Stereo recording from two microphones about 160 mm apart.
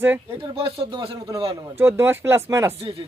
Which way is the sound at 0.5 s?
35° right (ahead or behind).